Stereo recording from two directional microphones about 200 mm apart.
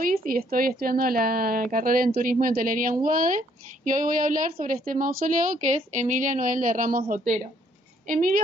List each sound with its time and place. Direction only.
0.0 s a woman's voice: 45° right (ahead or behind)